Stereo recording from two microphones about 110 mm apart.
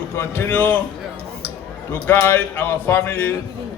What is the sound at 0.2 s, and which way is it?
Speech, 20° left (ahead or behind).